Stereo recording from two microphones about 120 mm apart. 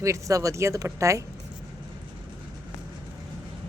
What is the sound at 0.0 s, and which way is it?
Speech, 25° right (ahead or behind).